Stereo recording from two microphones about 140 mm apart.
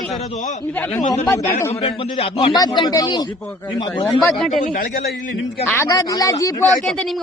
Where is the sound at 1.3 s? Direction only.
15° left (ahead or behind).